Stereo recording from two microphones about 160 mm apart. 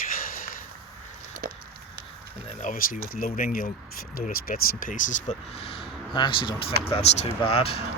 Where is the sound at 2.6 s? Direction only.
55° left (ahead or behind); by 7.8 s 35° left (ahead or behind).